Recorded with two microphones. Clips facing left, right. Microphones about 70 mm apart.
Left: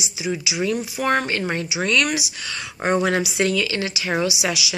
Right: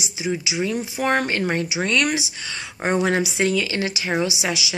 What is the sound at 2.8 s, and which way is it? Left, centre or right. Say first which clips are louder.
Speech: left 1 dB; centre.